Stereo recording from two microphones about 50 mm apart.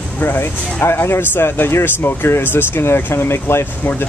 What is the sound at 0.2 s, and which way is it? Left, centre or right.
Speech, left.